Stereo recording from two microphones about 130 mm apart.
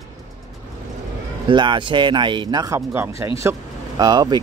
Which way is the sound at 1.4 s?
35° right (ahead or behind).